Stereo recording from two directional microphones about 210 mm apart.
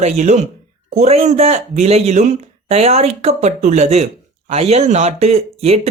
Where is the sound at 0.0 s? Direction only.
35° right (ahead or behind).